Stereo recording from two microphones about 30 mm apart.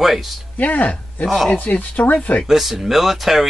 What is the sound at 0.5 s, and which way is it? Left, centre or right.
Speech, left.